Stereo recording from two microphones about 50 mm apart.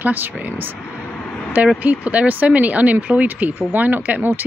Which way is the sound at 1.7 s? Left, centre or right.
Right.